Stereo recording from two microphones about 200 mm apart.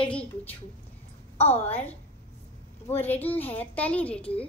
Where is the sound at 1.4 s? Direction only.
30° left (ahead or behind).